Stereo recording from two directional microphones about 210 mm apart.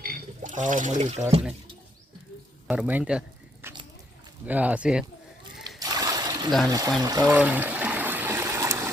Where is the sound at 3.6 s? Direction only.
10° right (ahead or behind).